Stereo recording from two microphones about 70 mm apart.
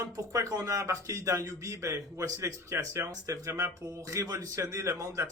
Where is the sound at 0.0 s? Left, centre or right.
Right.